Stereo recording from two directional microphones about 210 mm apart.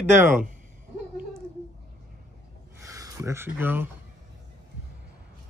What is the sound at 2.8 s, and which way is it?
Speech, 15° right (ahead or behind).